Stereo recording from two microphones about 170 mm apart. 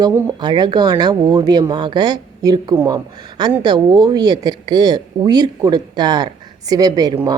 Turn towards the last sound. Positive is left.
turn(degrees=-20)  # may be behind; listen again after turning